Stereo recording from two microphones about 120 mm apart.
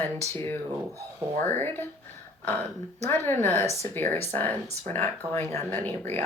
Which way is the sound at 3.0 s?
20° left (ahead or behind).